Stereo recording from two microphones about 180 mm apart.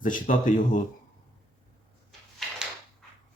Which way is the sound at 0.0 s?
45° left (ahead or behind).